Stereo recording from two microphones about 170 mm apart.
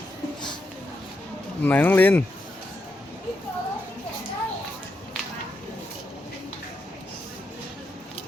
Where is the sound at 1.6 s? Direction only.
10° left (ahead or behind).